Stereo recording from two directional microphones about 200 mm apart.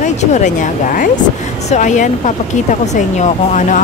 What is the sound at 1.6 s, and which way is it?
Speech, 40° left (ahead or behind).